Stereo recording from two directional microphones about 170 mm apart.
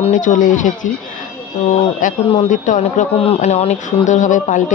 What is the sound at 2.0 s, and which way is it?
A man's voice, 45° left (ahead or behind).